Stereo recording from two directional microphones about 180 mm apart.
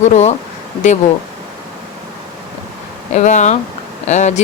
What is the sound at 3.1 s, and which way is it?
Speech, 40° left (ahead or behind).